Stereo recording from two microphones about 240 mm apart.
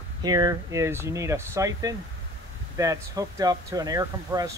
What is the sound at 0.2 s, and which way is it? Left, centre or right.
Speech, centre.